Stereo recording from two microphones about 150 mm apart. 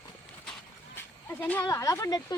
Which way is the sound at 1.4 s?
10° left (ahead or behind).